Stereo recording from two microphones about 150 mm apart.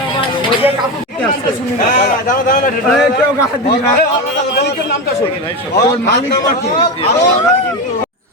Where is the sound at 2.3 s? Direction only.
70° left (ahead or behind).